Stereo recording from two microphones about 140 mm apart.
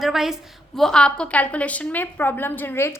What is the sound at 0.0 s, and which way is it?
A woman's voice, 5° right (ahead or behind).